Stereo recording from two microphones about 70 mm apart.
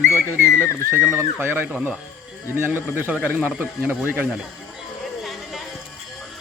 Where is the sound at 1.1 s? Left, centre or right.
Right.